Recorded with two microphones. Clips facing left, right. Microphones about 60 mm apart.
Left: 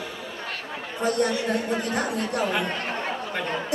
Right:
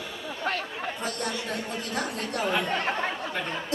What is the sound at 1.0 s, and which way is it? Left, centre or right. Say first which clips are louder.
A woman's voice: left 12 dB; left.